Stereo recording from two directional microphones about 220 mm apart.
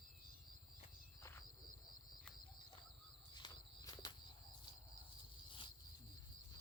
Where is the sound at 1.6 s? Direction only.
40° left (ahead or behind).